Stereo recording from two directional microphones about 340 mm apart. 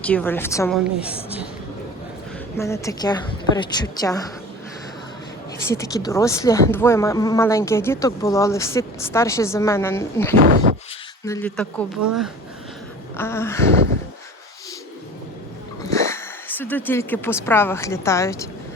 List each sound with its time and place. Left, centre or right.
0.0 s a woman's voice: centre
0.9 s a woman's voice: centre
2.6 s speech: centre
5.5 s speech: centre
10.4 s speech: right
11.3 s a woman's voice: centre
13.1 s speech: centre
15.8 s speech: centre